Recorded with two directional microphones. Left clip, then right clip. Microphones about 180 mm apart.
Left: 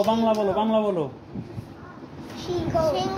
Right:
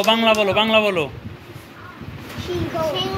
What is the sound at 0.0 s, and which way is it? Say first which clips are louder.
Speech: right 6 dB; 25° right (ahead or behind).